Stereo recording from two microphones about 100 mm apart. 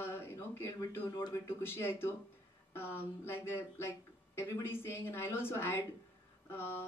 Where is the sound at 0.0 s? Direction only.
25° left (ahead or behind).